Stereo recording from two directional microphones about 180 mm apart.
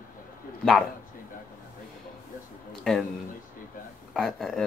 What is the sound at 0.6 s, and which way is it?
Speech, 5° left (ahead or behind).